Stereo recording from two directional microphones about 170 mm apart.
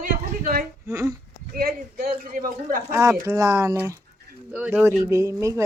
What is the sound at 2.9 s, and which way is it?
Speech, 15° right (ahead or behind).